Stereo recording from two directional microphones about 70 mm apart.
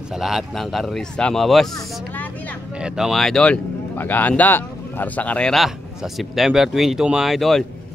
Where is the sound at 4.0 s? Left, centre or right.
Left.